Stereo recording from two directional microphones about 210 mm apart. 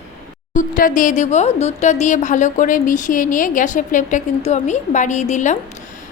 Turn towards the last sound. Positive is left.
turn(degrees=35)  # may be behind; listen again after turning